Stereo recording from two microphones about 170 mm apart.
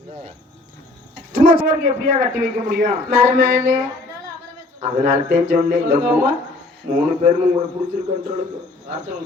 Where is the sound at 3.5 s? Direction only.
45° right (ahead or behind).